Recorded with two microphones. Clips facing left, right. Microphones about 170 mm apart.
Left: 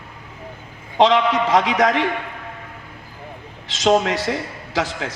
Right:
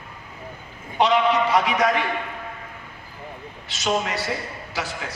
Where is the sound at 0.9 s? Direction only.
90° left.